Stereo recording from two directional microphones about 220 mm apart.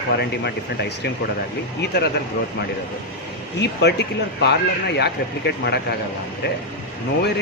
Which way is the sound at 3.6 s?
50° left (ahead or behind).